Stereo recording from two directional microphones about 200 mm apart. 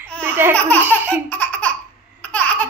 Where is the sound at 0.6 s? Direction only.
10° left (ahead or behind).